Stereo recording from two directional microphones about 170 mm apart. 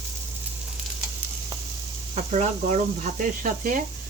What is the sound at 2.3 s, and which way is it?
Speech, 45° right (ahead or behind).